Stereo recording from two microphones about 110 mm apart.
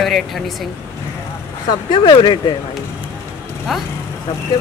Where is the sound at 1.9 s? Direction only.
45° left (ahead or behind).